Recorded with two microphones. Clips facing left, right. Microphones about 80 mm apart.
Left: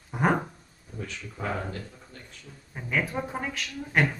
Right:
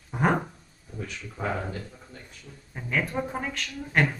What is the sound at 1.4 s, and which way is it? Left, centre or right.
Speech, centre.